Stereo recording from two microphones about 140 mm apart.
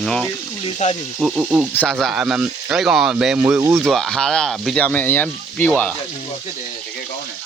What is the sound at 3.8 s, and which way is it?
Speech, centre (ahead or behind).